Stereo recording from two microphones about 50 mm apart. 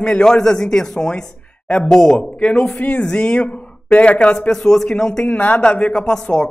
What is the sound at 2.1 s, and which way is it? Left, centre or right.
Speech, left.